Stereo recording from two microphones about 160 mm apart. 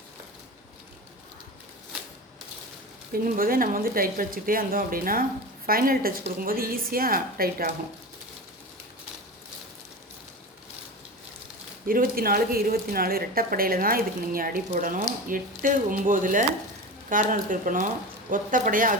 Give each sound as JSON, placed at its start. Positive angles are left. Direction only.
{"t": 3.1, "sound": "a woman's voice", "side_deg": -60}
{"t": 11.9, "sound": "a woman's voice", "side_deg": -65}